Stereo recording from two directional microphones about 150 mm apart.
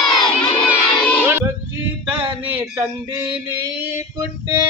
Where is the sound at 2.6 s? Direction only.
15° right (ahead or behind).